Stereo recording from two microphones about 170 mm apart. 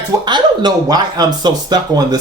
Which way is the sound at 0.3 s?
25° right (ahead or behind).